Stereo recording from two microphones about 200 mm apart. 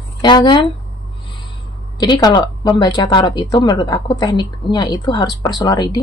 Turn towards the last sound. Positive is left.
turn(degrees=20)  # may be behind; listen again after turning